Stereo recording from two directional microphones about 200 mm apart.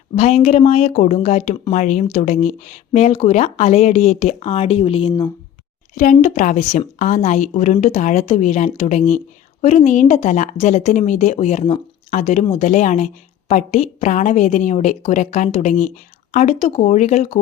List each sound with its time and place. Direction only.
0.2 s a woman's voice: 35° left (ahead or behind)
6.0 s a woman's voice: 40° left (ahead or behind)